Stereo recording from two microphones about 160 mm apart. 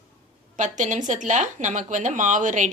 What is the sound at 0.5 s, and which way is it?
Speech, 50° right (ahead or behind).